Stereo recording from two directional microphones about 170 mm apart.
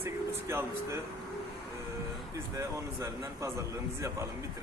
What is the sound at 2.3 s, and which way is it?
Speech, 20° right (ahead or behind).